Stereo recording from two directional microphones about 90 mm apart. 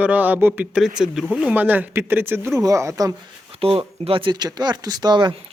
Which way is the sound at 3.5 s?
90° right.